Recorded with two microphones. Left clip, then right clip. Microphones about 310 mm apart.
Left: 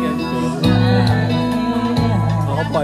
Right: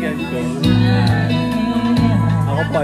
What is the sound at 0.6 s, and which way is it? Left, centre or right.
Music, left.